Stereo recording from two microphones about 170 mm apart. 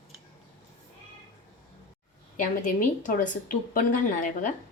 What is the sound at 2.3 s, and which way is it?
Speech, 50° left (ahead or behind).